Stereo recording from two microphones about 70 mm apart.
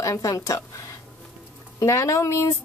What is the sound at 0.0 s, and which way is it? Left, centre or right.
Speech, left.